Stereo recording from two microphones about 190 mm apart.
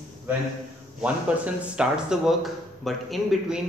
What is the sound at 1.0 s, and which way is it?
Speech, 5° right (ahead or behind).